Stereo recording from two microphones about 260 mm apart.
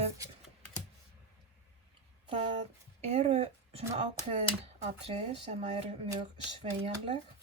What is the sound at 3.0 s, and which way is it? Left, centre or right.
Speech, right.